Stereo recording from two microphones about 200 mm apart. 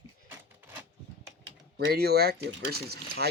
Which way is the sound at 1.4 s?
55° right (ahead or behind).